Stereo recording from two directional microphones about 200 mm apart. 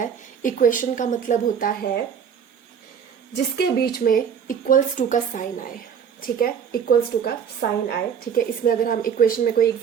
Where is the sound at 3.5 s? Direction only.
50° left (ahead or behind).